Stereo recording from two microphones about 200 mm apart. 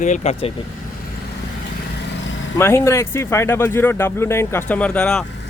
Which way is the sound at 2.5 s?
15° left (ahead or behind).